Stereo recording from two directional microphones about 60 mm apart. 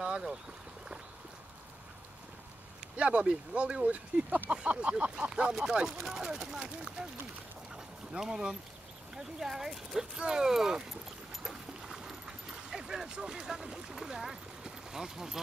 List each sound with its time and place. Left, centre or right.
0.0 s a sound: centre
2.8 s speech: right
7.7 s boat: centre
9.1 s speech: centre
11.4 s dog: centre